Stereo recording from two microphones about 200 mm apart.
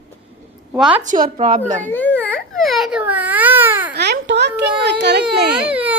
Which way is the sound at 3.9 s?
55° right (ahead or behind).